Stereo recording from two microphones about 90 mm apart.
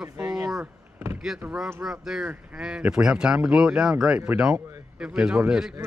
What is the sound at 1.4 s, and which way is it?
Speech, 25° right (ahead or behind).